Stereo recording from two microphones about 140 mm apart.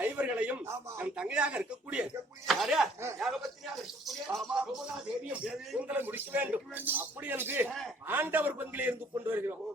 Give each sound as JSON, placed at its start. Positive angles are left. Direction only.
{"t": 0.0, "sound": "speech", "side_deg": -10}
{"t": 1.1, "sound": "speech", "side_deg": -5}